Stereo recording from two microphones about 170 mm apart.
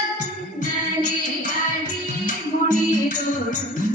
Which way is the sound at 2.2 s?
50° left (ahead or behind).